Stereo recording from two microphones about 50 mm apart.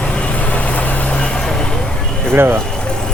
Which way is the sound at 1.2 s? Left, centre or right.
Centre.